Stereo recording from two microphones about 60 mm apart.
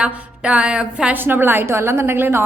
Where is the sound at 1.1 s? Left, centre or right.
Right.